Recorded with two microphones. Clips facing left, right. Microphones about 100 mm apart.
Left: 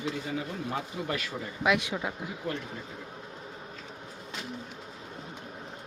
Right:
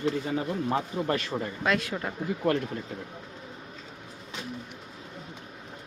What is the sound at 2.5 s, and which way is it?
Speech, 70° right (ahead or behind).